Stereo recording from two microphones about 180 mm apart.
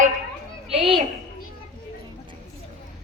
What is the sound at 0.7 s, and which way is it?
Speech, 30° right (ahead or behind).